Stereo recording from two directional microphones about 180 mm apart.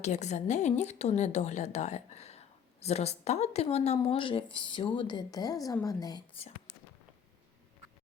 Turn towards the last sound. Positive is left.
turn(degrees=20)  # may be behind; listen again after turning